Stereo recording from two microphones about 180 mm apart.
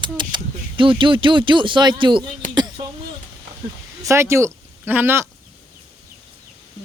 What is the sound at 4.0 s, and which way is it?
Speech, 15° right (ahead or behind).